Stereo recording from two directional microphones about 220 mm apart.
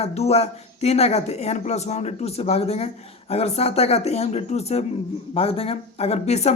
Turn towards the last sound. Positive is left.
turn(degrees=30)  # may be behind; listen again after turning